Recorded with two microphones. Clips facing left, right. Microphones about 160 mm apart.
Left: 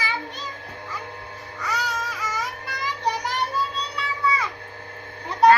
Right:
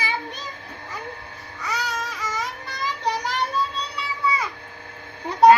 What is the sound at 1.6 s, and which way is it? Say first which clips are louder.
Babbling: even; centre (ahead or behind).